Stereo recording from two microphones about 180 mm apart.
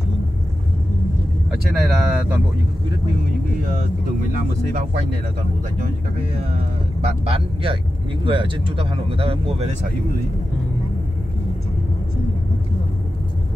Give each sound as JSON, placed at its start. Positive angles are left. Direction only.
{"t": 1.7, "sound": "speech", "side_deg": 0}
{"t": 7.2, "sound": "speech", "side_deg": -30}